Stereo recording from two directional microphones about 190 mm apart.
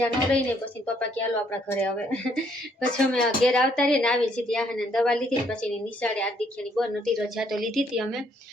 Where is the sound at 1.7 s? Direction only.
10° left (ahead or behind).